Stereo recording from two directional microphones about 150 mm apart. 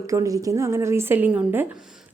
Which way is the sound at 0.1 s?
20° right (ahead or behind).